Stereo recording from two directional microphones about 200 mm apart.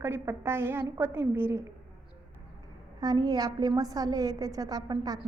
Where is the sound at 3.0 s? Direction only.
20° right (ahead or behind).